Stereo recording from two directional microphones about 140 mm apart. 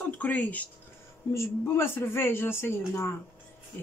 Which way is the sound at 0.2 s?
10° left (ahead or behind).